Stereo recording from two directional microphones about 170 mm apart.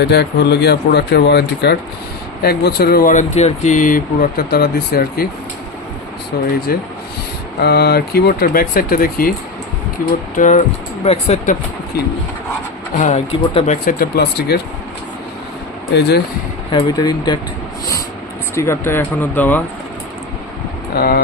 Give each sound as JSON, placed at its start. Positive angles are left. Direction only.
{"t": 0.0, "sound": "speech", "side_deg": 75}
{"t": 6.7, "sound": "speech", "side_deg": 60}
{"t": 7.6, "sound": "speech", "side_deg": 70}
{"t": 10.3, "sound": "speech", "side_deg": 45}
{"t": 11.0, "sound": "speech", "side_deg": 35}
{"t": 11.9, "sound": "speech", "side_deg": 65}
{"t": 13.0, "sound": "speech", "side_deg": 45}
{"t": 13.8, "sound": "speech", "side_deg": 65}
{"t": 16.0, "sound": "speech", "side_deg": 75}
{"t": 16.7, "sound": "speech", "side_deg": 25}
{"t": 18.5, "sound": "speech", "side_deg": 15}
{"t": 20.9, "sound": "speech", "side_deg": 65}